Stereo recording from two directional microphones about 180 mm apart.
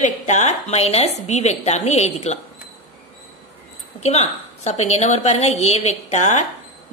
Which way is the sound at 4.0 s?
35° left (ahead or behind).